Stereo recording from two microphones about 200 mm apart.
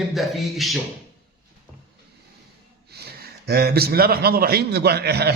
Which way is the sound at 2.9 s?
50° right (ahead or behind).